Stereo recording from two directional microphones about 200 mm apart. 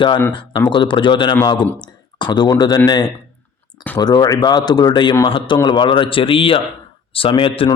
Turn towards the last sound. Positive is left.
turn(degrees=25)  # may be behind; listen again after turning